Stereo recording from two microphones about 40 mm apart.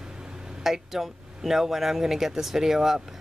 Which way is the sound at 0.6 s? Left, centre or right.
Centre.